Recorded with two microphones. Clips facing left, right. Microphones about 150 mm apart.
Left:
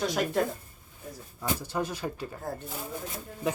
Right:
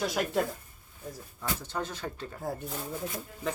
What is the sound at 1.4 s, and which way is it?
Speech, 10° left (ahead or behind).